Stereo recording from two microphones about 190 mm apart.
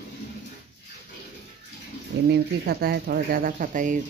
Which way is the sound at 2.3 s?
55° right (ahead or behind).